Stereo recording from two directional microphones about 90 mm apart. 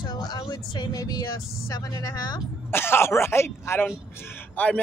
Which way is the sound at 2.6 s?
25° left (ahead or behind).